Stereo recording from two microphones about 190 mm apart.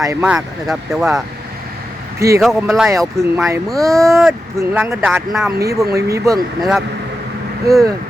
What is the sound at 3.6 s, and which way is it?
Speech, centre (ahead or behind).